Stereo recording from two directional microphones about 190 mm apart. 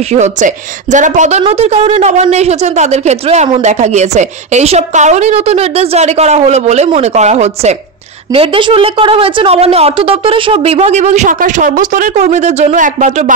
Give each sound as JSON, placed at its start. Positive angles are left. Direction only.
{"t": 0.1, "sound": "speech", "side_deg": -40}